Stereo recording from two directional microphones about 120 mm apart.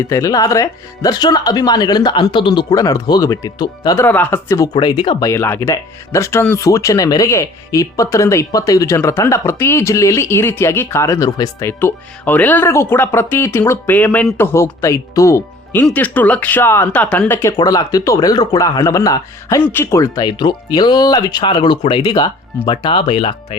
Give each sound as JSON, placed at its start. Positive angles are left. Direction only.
{"t": 0.0, "sound": "speech", "side_deg": 30}
{"t": 4.0, "sound": "speech", "side_deg": 15}
{"t": 5.3, "sound": "speech", "side_deg": 20}
{"t": 11.8, "sound": "speech", "side_deg": 15}
{"t": 15.8, "sound": "speech", "side_deg": 15}
{"t": 17.6, "sound": "speech", "side_deg": 30}